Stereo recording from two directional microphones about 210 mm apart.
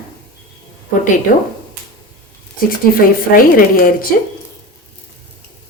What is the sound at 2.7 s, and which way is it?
Speech, 45° left (ahead or behind).